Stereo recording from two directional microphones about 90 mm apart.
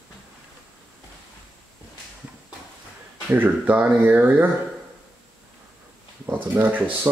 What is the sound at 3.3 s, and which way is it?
Speech, 20° right (ahead or behind).